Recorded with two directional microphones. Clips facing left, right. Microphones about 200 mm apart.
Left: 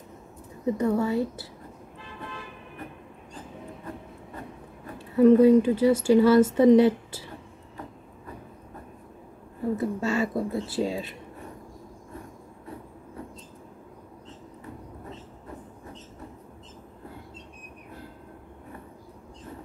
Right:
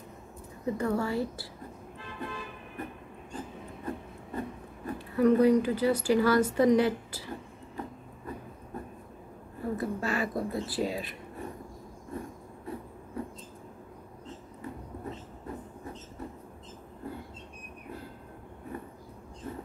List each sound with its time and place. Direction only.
0.7 s speech: 20° left (ahead or behind)
4.9 s speech: 25° left (ahead or behind)
9.8 s speech: 25° left (ahead or behind)